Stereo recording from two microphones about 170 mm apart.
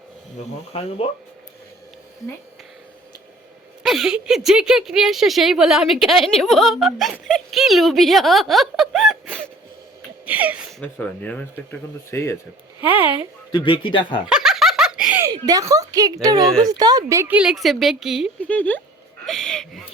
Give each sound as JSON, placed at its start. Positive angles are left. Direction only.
{"t": 0.7, "sound": "speech", "side_deg": 35}
{"t": 3.8, "sound": "speech", "side_deg": 0}
{"t": 10.2, "sound": "a sound", "side_deg": -10}
{"t": 10.8, "sound": "speech", "side_deg": 10}
{"t": 12.8, "sound": "speech", "side_deg": -10}
{"t": 13.1, "sound": "a woman's voice", "side_deg": 30}
{"t": 14.3, "sound": "giggle", "side_deg": -5}
{"t": 15.3, "sound": "a woman's voice", "side_deg": -20}
{"t": 17.3, "sound": "speech", "side_deg": -5}
{"t": 18.4, "sound": "speech", "side_deg": 10}
{"t": 19.2, "sound": "gasp", "side_deg": 0}